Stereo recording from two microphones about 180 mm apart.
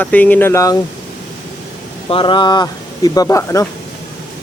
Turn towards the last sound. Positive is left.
turn(degrees=15)  # may be behind; listen again after turning